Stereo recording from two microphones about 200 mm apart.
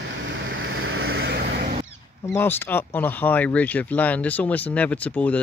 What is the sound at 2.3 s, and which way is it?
Speech, 10° left (ahead or behind).